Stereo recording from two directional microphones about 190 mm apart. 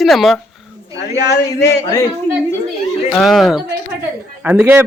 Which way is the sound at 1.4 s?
15° left (ahead or behind).